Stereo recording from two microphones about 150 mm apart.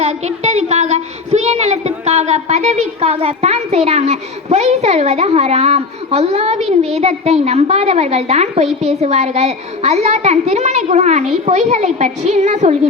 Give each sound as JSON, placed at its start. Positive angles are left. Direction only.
{"t": 0.0, "sound": "a woman's voice", "side_deg": -45}